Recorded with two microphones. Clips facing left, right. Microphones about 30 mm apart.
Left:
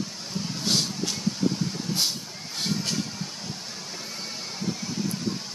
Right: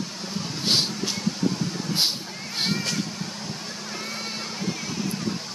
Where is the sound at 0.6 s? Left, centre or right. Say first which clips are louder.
Right 3 dB; right.